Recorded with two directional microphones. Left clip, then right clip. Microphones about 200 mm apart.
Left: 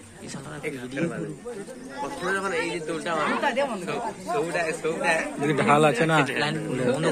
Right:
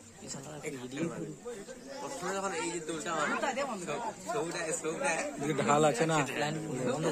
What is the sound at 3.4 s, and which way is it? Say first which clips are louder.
A man's voice: left 9 dB; 55° right (ahead or behind).